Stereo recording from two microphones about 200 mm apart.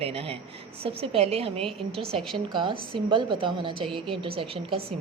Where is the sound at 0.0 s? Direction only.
30° right (ahead or behind).